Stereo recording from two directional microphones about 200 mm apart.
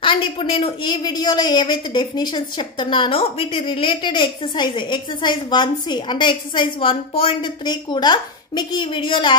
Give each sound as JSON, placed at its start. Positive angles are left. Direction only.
{"t": 0.0, "sound": "a woman's voice", "side_deg": 25}